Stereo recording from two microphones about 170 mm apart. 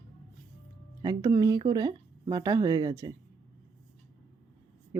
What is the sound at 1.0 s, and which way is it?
Speech, 20° right (ahead or behind).